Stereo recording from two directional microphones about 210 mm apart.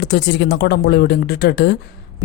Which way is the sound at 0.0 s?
50° left (ahead or behind).